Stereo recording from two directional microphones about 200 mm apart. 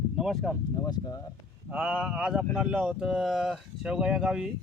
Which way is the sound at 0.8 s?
20° left (ahead or behind).